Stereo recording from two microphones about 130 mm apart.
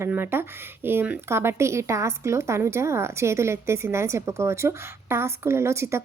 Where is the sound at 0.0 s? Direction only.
15° right (ahead or behind).